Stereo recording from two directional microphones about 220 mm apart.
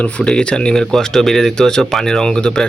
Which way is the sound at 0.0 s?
5° left (ahead or behind).